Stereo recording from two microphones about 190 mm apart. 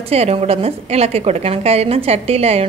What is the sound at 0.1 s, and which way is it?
Speech, 35° right (ahead or behind).